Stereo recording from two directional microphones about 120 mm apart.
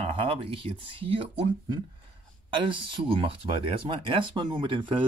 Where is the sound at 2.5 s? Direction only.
45° right (ahead or behind).